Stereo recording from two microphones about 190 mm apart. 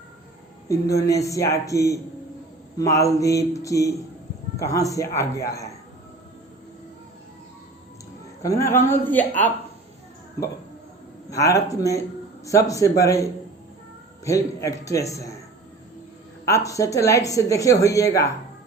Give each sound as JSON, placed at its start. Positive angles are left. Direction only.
{"t": 0.7, "sound": "speech", "side_deg": 15}
{"t": 8.4, "sound": "speech", "side_deg": 15}
{"t": 10.4, "sound": "speech", "side_deg": 15}
{"t": 16.6, "sound": "speech", "side_deg": 15}